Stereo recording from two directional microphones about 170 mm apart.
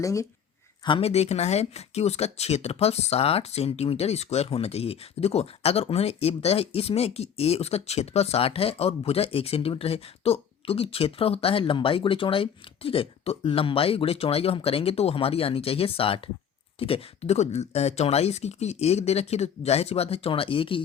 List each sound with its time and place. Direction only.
0.0 s speech: 20° left (ahead or behind)
0.9 s speech: 30° left (ahead or behind)